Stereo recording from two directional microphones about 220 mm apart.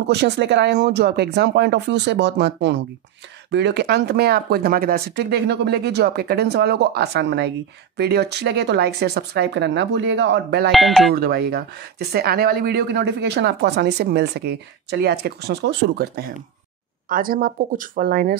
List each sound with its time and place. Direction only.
0.0 s speech: 50° right (ahead or behind)
10.7 s speech: centre (ahead or behind)
11.1 s speech: 45° right (ahead or behind)